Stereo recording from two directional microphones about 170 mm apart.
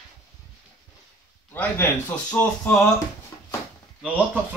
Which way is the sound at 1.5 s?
10° left (ahead or behind).